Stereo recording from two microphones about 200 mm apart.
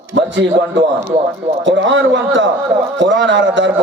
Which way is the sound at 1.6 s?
65° right (ahead or behind).